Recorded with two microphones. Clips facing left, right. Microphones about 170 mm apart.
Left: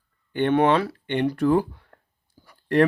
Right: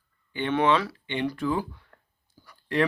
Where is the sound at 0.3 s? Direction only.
50° left (ahead or behind).